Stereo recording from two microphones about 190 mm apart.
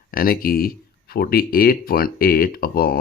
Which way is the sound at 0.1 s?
50° left (ahead or behind).